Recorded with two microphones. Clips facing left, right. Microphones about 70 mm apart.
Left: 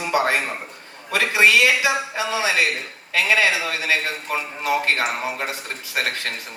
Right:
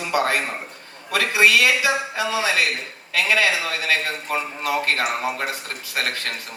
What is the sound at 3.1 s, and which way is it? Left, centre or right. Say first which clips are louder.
A man's voice: left 1 dB; left.